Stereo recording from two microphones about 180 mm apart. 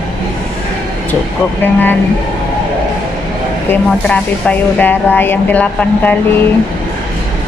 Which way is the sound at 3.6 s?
5° left (ahead or behind).